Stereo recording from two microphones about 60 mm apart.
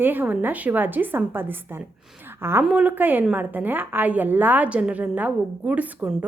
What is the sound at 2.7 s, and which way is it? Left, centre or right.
A woman's voice, right.